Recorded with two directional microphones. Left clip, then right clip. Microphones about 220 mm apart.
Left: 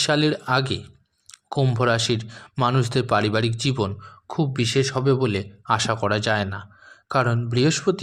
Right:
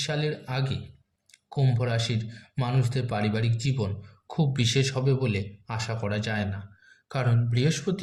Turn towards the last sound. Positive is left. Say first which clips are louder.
# left 8 dB
turn(degrees=30)  # may be behind; listen again after turning